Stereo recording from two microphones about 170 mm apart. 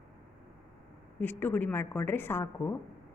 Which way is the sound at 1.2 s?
10° left (ahead or behind).